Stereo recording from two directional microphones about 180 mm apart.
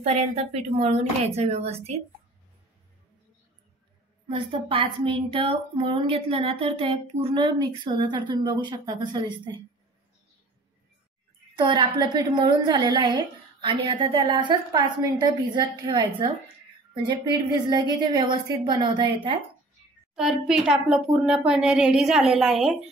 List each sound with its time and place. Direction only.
0.0 s a woman's voice: 35° right (ahead or behind)
4.3 s a woman's voice: 30° right (ahead or behind)
11.5 s a woman's voice: 25° right (ahead or behind)
20.2 s a woman's voice: 5° right (ahead or behind)